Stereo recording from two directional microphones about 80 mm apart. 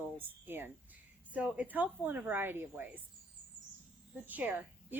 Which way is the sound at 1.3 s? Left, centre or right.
Centre.